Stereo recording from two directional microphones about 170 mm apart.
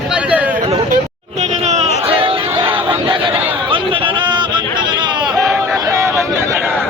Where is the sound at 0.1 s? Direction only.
10° right (ahead or behind).